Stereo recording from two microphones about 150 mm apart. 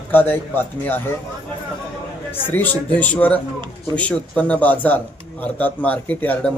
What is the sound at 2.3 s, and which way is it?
A man's voice, 10° left (ahead or behind).